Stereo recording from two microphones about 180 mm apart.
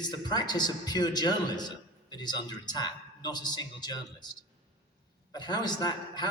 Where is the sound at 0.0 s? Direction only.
25° left (ahead or behind).